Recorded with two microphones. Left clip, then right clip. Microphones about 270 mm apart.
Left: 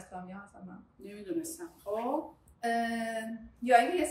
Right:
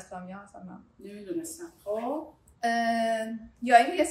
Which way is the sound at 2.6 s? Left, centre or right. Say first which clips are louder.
Right 6 dB; right.